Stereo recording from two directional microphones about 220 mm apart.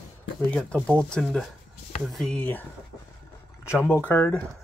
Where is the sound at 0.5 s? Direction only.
5° left (ahead or behind).